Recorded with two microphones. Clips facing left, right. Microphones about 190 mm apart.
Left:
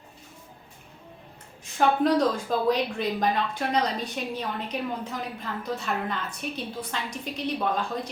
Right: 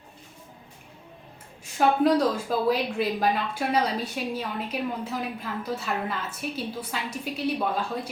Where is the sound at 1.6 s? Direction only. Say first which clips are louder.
Right 1 dB; 10° right (ahead or behind).